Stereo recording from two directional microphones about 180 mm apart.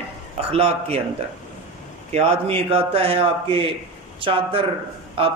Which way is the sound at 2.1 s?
35° right (ahead or behind).